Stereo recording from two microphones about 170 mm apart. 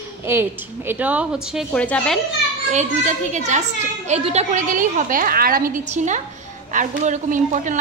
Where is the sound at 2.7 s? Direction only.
45° right (ahead or behind).